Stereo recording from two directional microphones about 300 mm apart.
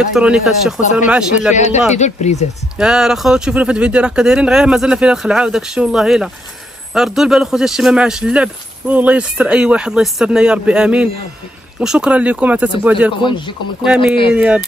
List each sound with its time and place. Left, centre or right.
0.0 s a man's voice: centre
1.5 s speech: left
2.8 s a man's voice: centre
13.2 s speech: centre
13.9 s a man's voice: centre